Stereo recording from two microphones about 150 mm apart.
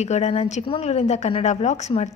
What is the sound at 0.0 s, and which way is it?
A woman's voice, 50° left (ahead or behind).